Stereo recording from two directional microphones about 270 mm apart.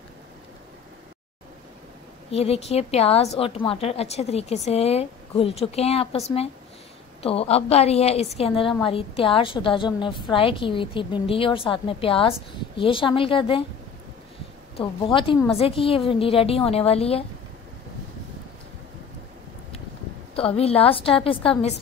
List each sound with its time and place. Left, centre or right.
2.3 s a woman's voice: left
14.8 s a woman's voice: centre
20.3 s a woman's voice: left